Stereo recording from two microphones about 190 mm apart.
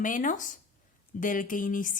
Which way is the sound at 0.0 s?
45° left (ahead or behind).